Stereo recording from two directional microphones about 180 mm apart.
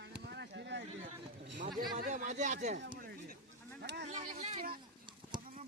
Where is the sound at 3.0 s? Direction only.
55° right (ahead or behind).